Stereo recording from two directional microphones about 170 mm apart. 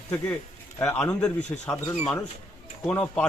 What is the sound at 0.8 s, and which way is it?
A man's voice, 5° left (ahead or behind).